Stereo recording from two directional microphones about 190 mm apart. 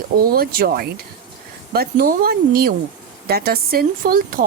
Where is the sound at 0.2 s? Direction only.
50° right (ahead or behind).